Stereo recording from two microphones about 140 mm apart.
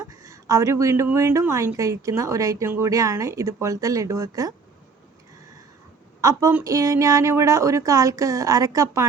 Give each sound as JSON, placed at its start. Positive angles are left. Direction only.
{"t": 0.0, "sound": "a woman's voice", "side_deg": -25}
{"t": 6.2, "sound": "a woman's voice", "side_deg": -20}